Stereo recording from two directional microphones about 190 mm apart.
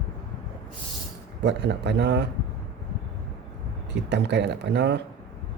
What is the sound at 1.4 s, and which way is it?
Speech, 65° right (ahead or behind).